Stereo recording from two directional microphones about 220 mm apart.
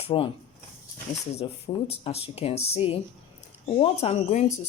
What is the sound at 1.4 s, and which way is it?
Speech, 25° left (ahead or behind).